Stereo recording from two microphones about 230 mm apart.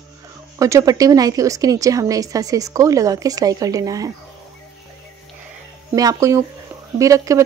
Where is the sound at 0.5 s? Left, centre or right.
Centre.